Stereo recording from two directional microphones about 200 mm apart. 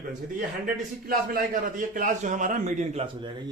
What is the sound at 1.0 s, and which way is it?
A man's voice, 45° right (ahead or behind).